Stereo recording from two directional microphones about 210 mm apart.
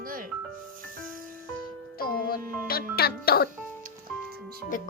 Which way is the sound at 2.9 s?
45° left (ahead or behind).